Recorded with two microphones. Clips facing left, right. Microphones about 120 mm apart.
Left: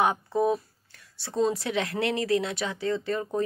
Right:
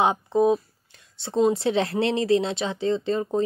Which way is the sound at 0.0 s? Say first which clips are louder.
Right 4 dB; 20° right (ahead or behind).